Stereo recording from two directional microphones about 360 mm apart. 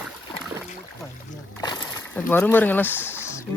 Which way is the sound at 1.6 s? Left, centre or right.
Centre.